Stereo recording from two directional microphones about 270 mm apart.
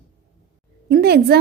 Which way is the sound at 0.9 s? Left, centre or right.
Right.